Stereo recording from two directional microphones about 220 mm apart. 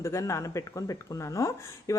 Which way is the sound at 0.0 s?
15° left (ahead or behind).